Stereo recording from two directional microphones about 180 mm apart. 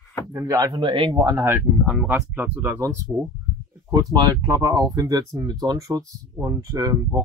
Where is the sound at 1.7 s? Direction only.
5° right (ahead or behind).